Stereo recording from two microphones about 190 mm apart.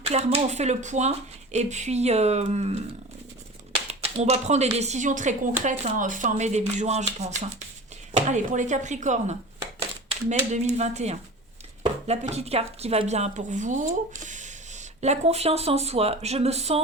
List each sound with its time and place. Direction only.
0.0 s speech: 35° right (ahead or behind)
4.0 s speech: 35° right (ahead or behind)